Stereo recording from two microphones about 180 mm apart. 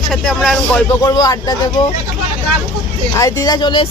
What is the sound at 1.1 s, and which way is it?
Speech, 20° left (ahead or behind).